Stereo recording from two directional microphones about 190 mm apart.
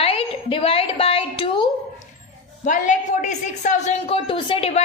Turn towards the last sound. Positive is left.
turn(degrees=30)  # may be behind; listen again after turning